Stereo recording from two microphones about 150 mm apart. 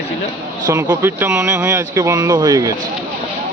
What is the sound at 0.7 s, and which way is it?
Speech, 15° right (ahead or behind).